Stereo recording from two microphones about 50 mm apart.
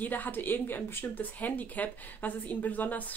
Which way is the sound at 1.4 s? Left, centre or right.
Left.